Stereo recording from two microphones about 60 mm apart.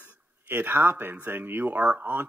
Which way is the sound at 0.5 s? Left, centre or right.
Right.